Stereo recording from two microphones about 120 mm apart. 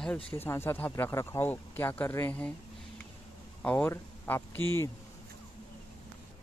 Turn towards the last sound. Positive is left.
turn(degrees=15)  # may be behind; listen again after turning